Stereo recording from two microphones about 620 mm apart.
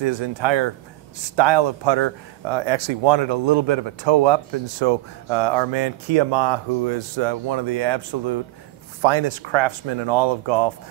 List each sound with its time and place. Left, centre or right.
0.0 s speech: right